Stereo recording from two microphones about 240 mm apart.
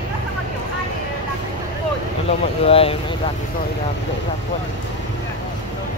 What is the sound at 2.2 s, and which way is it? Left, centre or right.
Speech, left.